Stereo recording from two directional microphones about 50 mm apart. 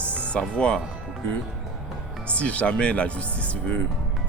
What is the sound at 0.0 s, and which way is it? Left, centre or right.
Music, left.